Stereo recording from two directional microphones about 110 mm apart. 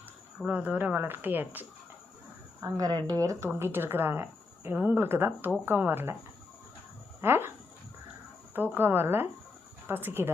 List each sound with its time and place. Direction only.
0.3 s speech: 10° right (ahead or behind)
2.6 s speech: 30° right (ahead or behind)
3.5 s speech: 20° right (ahead or behind)
7.2 s speech: 20° right (ahead or behind)
8.5 s speech: 15° right (ahead or behind)